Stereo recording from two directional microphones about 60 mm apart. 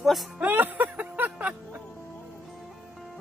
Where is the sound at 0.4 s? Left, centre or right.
Right.